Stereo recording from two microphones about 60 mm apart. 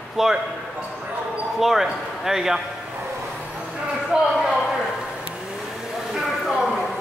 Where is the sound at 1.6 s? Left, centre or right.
Centre.